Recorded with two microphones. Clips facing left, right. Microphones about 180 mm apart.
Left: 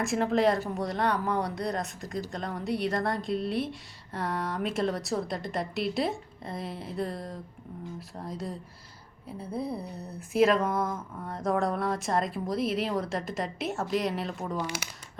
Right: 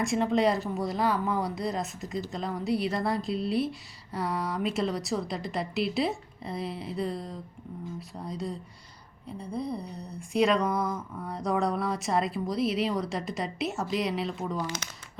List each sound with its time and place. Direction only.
0.0 s speech: centre (ahead or behind)